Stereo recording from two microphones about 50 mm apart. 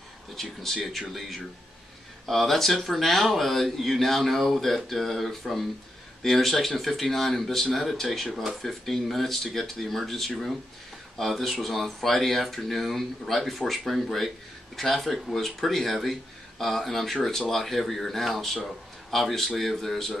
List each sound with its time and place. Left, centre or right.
0.4 s speech: centre
2.2 s speech: centre